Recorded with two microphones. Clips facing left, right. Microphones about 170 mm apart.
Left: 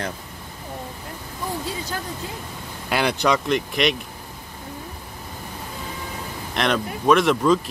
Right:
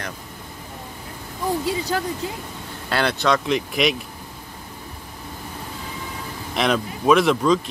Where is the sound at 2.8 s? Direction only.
15° left (ahead or behind).